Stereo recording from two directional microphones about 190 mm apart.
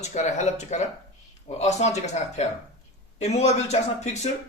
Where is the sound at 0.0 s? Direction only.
35° left (ahead or behind).